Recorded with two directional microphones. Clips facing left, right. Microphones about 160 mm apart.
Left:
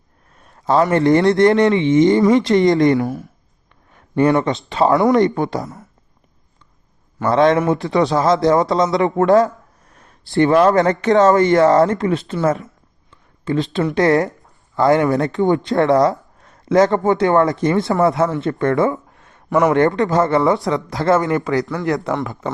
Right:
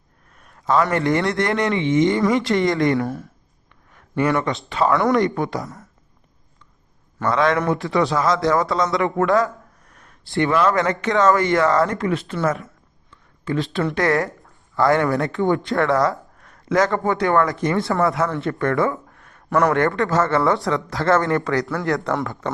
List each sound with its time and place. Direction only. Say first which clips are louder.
0.3 s speech: left 3 dB; 30° left (ahead or behind)
2.2 s speech: left 5 dB; 20° left (ahead or behind)
7.3 s speech: left 5 dB; 25° left (ahead or behind)
10.0 s speech: left 6 dB; 35° left (ahead or behind); by 19.4 s 20° left (ahead or behind)
19.5 s a man's voice: left 3 dB; centre (ahead or behind)
19.7 s speech: left 4 dB; 20° left (ahead or behind)